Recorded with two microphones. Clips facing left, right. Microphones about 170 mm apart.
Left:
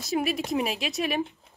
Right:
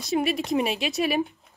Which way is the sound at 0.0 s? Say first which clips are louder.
Right 2 dB; centre (ahead or behind).